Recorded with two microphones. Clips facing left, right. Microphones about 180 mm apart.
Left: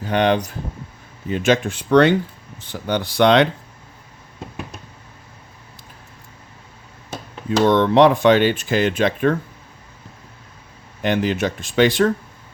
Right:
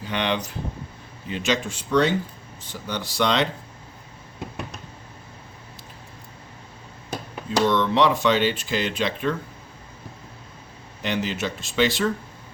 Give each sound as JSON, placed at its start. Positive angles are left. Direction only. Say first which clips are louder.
{"t": 0.0, "sound": "speech", "louder": "left 8 dB", "side_deg": 45}
{"t": 7.6, "sound": "speech", "louder": "left 7 dB", "side_deg": 55}
{"t": 11.0, "sound": "speech", "louder": "left 7 dB", "side_deg": 50}